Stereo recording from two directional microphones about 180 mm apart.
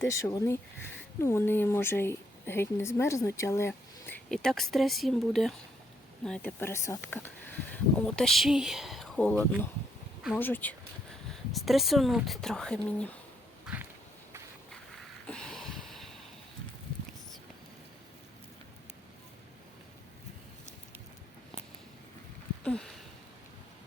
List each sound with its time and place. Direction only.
0.0 s a woman's voice: 15° left (ahead or behind)
11.3 s speech: centre (ahead or behind)
13.7 s a sound: 5° right (ahead or behind)
22.6 s sniff: 5° left (ahead or behind)